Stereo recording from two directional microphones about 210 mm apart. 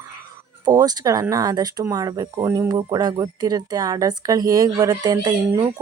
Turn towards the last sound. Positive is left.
turn(degrees=-20)  # may be behind; listen again after turning